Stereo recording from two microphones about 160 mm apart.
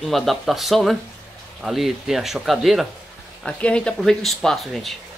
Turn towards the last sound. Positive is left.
turn(degrees=0)  # may be behind; listen again after turning